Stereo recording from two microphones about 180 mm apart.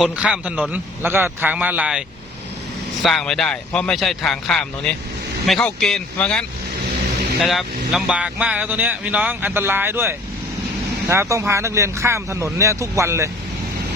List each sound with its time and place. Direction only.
0.0 s speech: 5° right (ahead or behind)
7.4 s speech: centre (ahead or behind)